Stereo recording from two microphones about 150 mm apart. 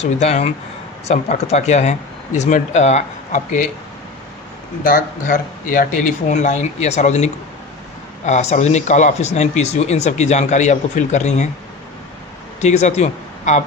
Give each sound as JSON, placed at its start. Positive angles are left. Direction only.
{"t": 0.0, "sound": "speech", "side_deg": 50}
{"t": 4.8, "sound": "speech", "side_deg": 65}
{"t": 8.3, "sound": "speech", "side_deg": 50}
{"t": 12.5, "sound": "speech", "side_deg": 50}